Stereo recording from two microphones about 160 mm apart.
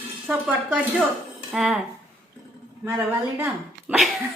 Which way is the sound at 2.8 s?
10° right (ahead or behind).